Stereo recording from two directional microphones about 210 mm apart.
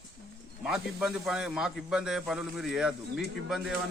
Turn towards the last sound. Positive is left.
turn(degrees=0)  # may be behind; listen again after turning